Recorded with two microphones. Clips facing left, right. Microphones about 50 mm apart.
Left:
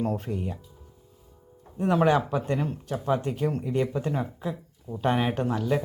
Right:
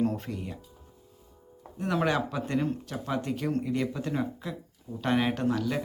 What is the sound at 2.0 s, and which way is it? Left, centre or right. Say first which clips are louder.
Speech: left 5 dB; left.